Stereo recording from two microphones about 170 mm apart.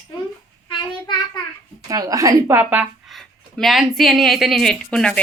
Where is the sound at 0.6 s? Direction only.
25° left (ahead or behind).